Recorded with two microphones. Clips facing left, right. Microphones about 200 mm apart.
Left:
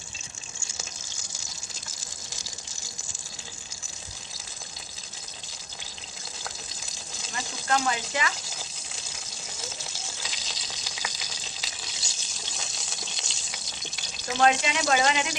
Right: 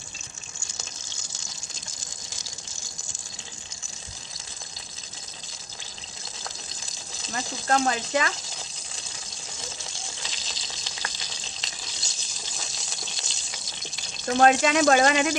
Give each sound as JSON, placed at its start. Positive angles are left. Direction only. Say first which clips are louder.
{"t": 7.7, "sound": "speech", "louder": "right 4 dB", "side_deg": -35}
{"t": 9.9, "sound": "frying", "louder": "even", "side_deg": 0}
{"t": 14.3, "sound": "speech", "louder": "right 4 dB", "side_deg": -50}